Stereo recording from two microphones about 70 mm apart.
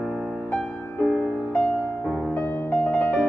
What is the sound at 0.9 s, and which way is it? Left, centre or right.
Music, left.